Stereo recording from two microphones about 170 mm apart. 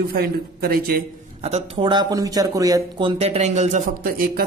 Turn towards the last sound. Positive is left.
turn(degrees=-60)  # may be behind; listen again after turning